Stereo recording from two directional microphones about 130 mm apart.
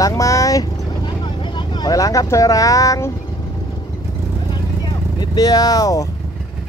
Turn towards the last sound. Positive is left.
turn(degrees=30)  # may be behind; listen again after turning